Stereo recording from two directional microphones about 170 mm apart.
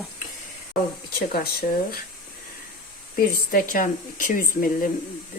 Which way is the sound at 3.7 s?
50° left (ahead or behind).